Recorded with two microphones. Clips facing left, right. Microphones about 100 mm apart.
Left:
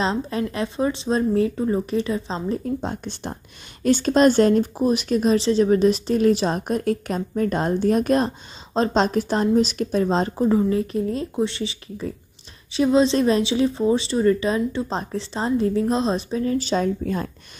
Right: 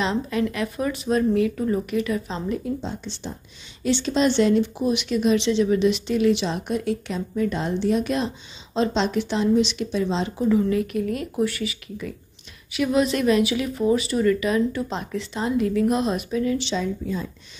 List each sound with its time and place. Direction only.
0.0 s speech: 30° left (ahead or behind)
2.8 s speech: 50° left (ahead or behind)